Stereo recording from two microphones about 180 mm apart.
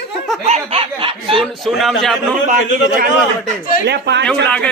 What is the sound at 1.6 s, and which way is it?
Speech, centre (ahead or behind).